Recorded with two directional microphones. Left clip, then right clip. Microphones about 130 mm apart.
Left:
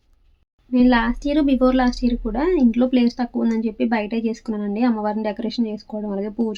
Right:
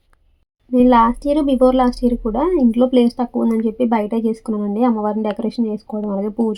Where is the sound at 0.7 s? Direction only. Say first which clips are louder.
Right 6 dB; 30° right (ahead or behind).